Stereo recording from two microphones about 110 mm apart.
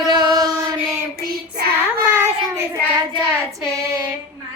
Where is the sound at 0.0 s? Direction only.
40° right (ahead or behind).